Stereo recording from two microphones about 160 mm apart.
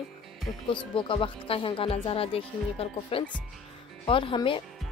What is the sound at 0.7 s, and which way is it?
Speech, 30° left (ahead or behind).